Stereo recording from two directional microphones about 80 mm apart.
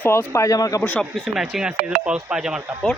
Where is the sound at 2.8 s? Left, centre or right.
Centre.